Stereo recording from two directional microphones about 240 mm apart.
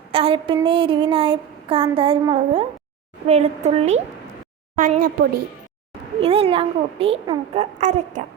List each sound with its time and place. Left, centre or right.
0.1 s a sound: right
0.6 s child singing: right
4.8 s a woman's voice: right
6.1 s child singing: right